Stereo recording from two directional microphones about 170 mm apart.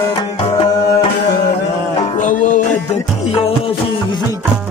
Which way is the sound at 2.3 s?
50° left (ahead or behind).